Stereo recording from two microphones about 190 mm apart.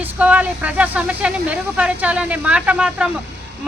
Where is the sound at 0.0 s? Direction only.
10° right (ahead or behind).